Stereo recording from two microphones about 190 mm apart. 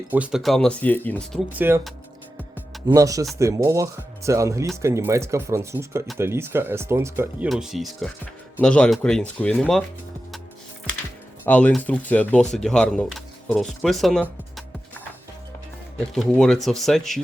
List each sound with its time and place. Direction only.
0.1 s speech: 5° right (ahead or behind)
1.5 s speech: 10° right (ahead or behind)
2.8 s speech: 20° right (ahead or behind)
7.4 s speech: centre (ahead or behind)
11.4 s speech: 10° left (ahead or behind)
16.1 s speech: centre (ahead or behind)